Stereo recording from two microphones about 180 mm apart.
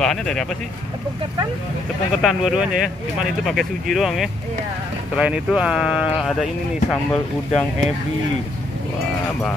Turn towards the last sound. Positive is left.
turn(degrees=5)  # may be behind; listen again after turning